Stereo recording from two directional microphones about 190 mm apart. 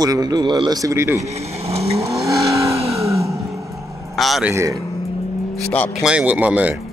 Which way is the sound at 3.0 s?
15° right (ahead or behind).